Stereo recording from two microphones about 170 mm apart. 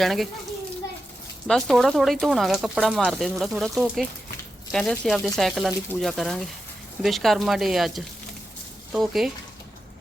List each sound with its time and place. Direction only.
0.0 s speech: centre (ahead or behind)
1.5 s speech: centre (ahead or behind)